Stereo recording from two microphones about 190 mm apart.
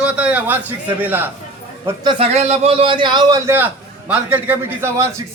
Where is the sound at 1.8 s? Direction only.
25° right (ahead or behind).